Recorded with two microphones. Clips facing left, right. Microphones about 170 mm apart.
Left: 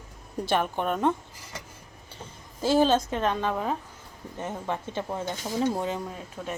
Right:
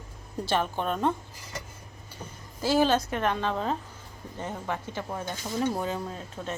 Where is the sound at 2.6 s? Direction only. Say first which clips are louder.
Left 2 dB; 20° left (ahead or behind).